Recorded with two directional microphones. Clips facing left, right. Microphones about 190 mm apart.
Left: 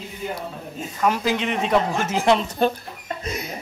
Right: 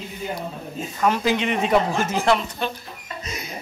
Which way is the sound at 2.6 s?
45° left (ahead or behind).